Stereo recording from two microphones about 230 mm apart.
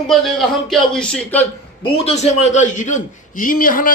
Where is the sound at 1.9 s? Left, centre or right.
Left.